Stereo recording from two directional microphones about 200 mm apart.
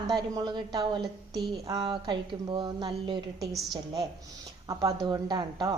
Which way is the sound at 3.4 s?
Centre (ahead or behind).